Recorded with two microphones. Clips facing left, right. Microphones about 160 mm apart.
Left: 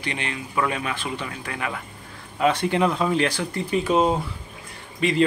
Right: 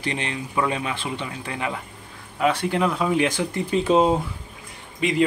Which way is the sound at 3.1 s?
15° right (ahead or behind).